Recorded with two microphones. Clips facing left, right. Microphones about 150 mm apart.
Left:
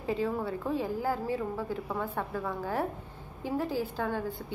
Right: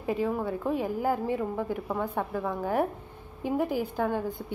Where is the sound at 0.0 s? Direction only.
10° right (ahead or behind).